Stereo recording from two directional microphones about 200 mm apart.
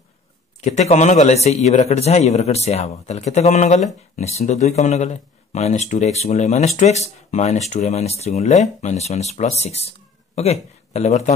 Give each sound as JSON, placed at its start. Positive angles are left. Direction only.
{"t": 0.7, "sound": "a man's voice", "side_deg": 35}